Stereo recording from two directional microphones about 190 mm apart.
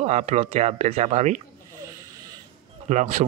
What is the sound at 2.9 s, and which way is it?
Speech, 35° right (ahead or behind).